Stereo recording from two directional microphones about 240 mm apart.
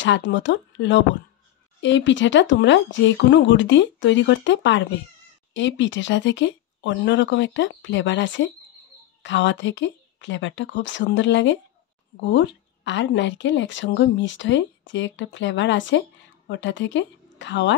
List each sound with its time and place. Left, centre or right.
0.0 s speech: left